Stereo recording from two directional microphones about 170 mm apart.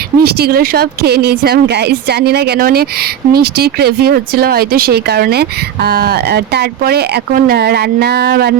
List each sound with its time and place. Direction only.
0.2 s speech: 65° right (ahead or behind)